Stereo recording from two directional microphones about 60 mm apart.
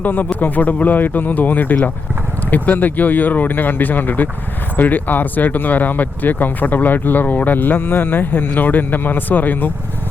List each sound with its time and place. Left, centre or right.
0.0 s speech: left